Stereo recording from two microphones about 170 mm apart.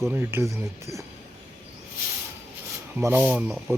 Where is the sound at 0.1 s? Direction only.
15° right (ahead or behind).